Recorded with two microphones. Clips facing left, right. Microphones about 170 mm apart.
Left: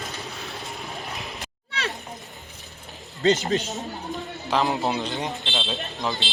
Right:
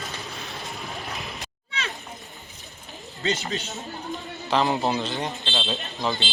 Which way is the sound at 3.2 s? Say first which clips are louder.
Left 7 dB; 40° left (ahead or behind).